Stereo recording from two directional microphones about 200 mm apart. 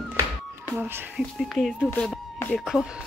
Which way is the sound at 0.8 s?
Centre (ahead or behind).